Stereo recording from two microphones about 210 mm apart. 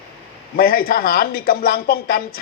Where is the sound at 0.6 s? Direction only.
45° left (ahead or behind).